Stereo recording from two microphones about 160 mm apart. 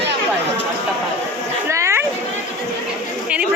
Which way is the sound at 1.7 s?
15° right (ahead or behind).